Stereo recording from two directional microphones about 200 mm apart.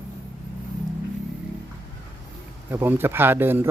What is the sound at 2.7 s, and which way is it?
Speech, 10° right (ahead or behind).